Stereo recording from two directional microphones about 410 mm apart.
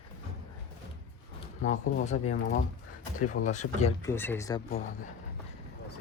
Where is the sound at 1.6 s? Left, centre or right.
Centre.